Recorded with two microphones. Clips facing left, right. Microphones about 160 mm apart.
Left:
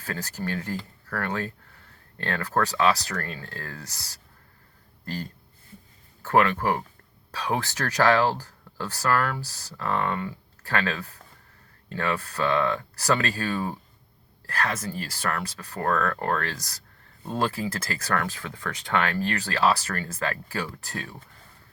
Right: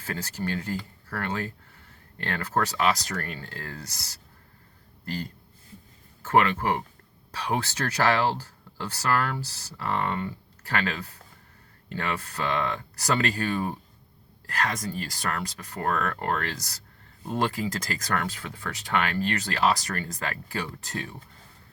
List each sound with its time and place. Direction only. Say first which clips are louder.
0.1 s speech: even; 20° right (ahead or behind)
6.3 s speech: left 1 dB; 20° right (ahead or behind)